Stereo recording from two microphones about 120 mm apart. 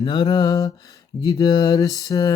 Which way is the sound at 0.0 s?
40° left (ahead or behind).